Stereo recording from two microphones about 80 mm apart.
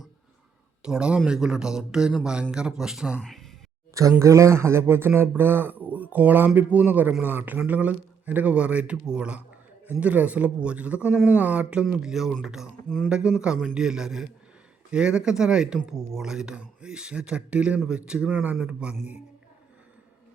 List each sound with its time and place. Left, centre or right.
0.8 s speech: centre
3.2 s a sound: centre
4.2 s a man's voice: right; by 19.1 s centre